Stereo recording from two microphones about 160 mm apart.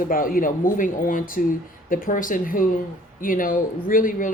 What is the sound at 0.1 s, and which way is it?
Speech, 60° left (ahead or behind).